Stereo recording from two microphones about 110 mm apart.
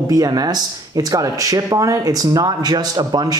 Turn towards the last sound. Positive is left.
turn(degrees=-40)  # may be behind; listen again after turning